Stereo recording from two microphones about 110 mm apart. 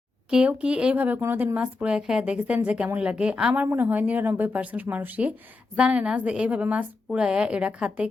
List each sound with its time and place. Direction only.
0.3 s speech: 10° right (ahead or behind)